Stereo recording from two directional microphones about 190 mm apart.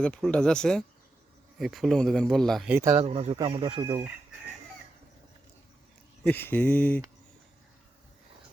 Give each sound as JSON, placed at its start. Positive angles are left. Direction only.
{"t": 0.0, "sound": "speech", "side_deg": 5}
{"t": 2.7, "sound": "speech", "side_deg": -15}
{"t": 3.0, "sound": "speech", "side_deg": -30}
{"t": 6.2, "sound": "speech", "side_deg": 10}